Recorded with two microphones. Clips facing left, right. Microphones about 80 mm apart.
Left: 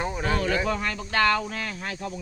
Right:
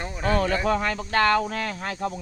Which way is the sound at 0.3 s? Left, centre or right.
Right.